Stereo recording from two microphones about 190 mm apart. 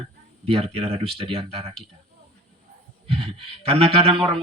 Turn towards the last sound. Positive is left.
turn(degrees=-30)  # may be behind; listen again after turning